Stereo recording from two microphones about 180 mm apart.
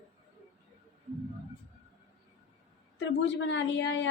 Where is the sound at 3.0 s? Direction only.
90° left.